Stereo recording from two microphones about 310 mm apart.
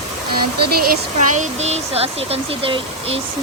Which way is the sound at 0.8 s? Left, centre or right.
Right.